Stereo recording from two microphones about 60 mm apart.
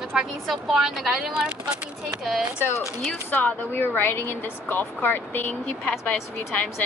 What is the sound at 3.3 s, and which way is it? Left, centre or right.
Speech, left.